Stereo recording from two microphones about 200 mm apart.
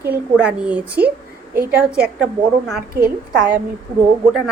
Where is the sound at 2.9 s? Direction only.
45° right (ahead or behind).